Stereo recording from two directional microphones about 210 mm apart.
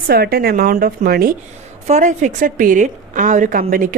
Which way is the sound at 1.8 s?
35° right (ahead or behind).